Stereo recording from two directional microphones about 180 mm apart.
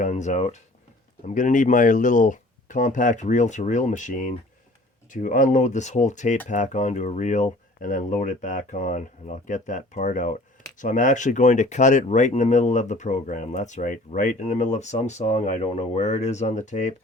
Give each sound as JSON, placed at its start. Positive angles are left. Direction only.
{"t": 0.0, "sound": "speech", "side_deg": 40}